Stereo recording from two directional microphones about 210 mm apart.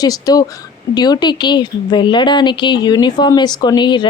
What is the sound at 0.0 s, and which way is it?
A woman's voice, 15° left (ahead or behind).